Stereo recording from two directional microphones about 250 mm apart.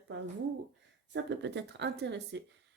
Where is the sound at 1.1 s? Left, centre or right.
Right.